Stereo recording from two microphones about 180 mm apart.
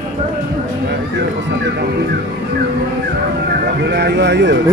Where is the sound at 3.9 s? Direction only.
65° right (ahead or behind).